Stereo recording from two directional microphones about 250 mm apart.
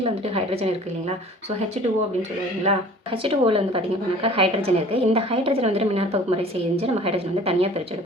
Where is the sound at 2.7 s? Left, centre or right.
Right.